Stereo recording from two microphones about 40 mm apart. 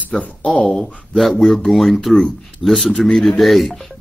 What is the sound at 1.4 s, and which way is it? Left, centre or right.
Speech, centre.